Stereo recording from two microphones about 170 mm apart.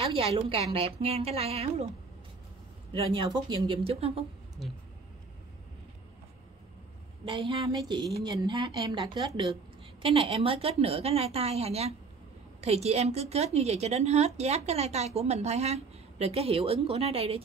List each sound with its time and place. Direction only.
0.1 s a woman's voice: 35° right (ahead or behind)
2.9 s a woman's voice: 30° right (ahead or behind)
7.2 s a woman's voice: 30° right (ahead or behind)